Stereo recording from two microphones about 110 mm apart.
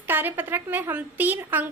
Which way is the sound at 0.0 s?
15° right (ahead or behind).